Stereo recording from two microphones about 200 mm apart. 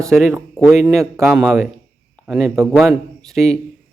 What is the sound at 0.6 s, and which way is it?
Speech, 15° right (ahead or behind).